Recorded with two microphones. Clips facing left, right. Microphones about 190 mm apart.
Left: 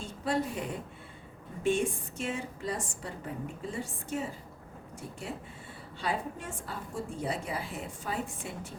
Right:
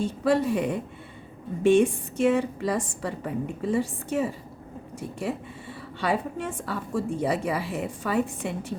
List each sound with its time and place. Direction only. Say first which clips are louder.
0.0 s a woman's voice: right 9 dB; 75° right (ahead or behind)
6.0 s a woman's voice: right 7 dB; 75° right (ahead or behind)